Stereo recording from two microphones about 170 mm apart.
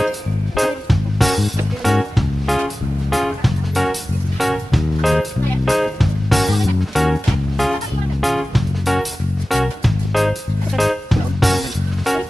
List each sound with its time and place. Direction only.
0.6 s music: centre (ahead or behind)